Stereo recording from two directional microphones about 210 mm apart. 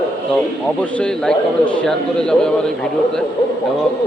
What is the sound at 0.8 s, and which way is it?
A man's voice, 5° left (ahead or behind).